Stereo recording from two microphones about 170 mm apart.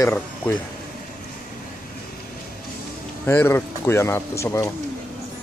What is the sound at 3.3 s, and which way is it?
Speech, 15° left (ahead or behind).